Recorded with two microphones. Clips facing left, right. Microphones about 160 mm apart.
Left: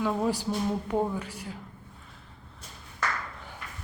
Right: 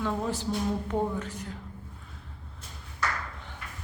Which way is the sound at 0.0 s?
10° left (ahead or behind).